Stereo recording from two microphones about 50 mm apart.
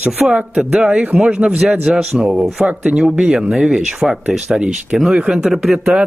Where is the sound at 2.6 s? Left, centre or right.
Right.